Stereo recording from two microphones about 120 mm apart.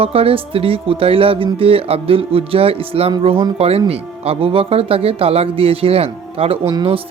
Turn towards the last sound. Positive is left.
turn(degrees=-40)  # may be behind; listen again after turning